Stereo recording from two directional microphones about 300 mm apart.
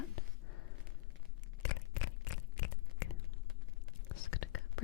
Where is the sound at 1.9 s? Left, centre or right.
Left.